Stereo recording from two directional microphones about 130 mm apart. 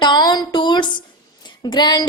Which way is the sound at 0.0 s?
35° left (ahead or behind).